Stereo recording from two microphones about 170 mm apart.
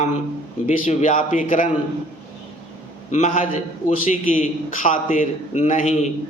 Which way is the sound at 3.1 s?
45° left (ahead or behind).